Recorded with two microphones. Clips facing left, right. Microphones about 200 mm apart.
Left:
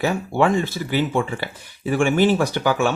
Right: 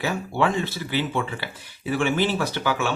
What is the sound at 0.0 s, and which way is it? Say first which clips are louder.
Speech: left 4 dB; 45° left (ahead or behind).